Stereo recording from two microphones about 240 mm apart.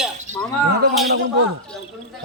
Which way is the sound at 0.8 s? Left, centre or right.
Right.